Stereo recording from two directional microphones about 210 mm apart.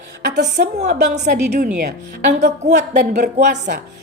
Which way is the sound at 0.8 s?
50° right (ahead or behind).